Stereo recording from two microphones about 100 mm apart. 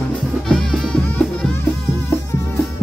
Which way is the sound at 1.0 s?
15° left (ahead or behind).